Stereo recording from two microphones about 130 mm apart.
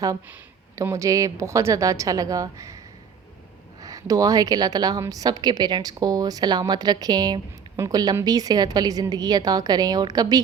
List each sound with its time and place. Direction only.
0.8 s a woman's voice: 25° right (ahead or behind)